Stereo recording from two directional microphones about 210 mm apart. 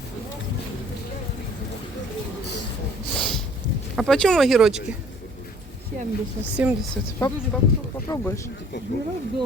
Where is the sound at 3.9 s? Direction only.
Centre (ahead or behind).